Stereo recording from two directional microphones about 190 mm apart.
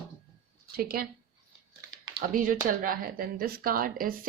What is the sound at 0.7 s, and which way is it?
Speech, 50° right (ahead or behind).